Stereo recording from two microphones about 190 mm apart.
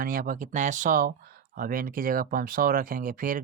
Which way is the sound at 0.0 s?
45° right (ahead or behind).